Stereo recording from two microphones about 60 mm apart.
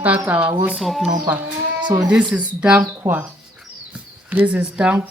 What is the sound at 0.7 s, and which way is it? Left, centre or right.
Speech, centre.